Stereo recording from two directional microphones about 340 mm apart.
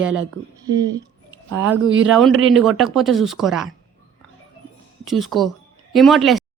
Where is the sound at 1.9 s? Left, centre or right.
Right.